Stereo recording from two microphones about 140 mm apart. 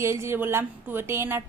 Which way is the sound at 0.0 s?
20° right (ahead or behind).